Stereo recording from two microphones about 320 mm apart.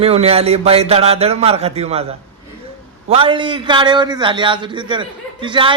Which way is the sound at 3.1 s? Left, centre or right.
Centre.